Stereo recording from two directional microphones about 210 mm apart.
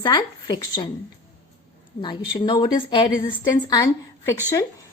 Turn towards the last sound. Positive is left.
turn(degrees=15)  # may be behind; listen again after turning